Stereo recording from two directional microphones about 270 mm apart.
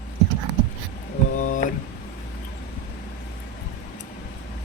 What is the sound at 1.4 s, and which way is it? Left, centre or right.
Speech, left.